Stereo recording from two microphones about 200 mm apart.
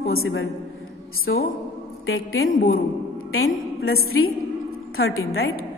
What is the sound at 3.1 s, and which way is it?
Mantra, 90° left.